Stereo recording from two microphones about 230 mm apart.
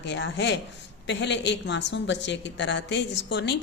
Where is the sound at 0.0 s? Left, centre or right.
Left.